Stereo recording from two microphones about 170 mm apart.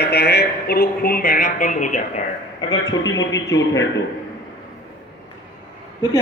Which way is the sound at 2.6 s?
25° left (ahead or behind).